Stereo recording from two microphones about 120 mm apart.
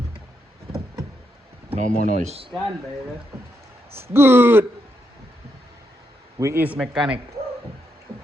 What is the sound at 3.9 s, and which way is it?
Speech, 20° right (ahead or behind).